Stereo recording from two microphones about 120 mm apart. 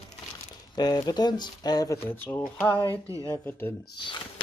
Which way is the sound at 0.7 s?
35° left (ahead or behind).